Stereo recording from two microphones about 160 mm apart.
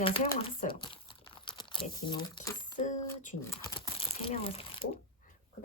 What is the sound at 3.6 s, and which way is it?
Crumpling, 30° left (ahead or behind).